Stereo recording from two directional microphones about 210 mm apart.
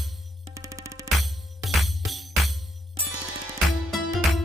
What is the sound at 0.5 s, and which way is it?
Music, 15° right (ahead or behind).